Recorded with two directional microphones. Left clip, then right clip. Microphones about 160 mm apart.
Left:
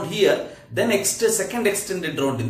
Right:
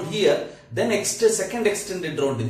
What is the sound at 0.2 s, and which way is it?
Speech, 15° left (ahead or behind).